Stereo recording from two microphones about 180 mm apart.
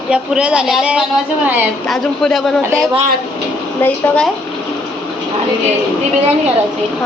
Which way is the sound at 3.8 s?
5° left (ahead or behind).